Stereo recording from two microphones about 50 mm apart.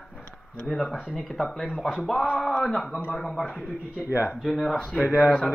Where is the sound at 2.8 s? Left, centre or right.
Left.